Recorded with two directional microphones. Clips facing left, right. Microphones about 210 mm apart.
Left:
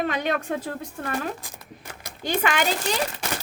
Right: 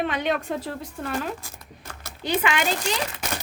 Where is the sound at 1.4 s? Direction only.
15° left (ahead or behind).